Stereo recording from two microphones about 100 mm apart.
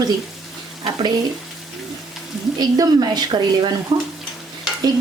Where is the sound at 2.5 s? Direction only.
40° right (ahead or behind).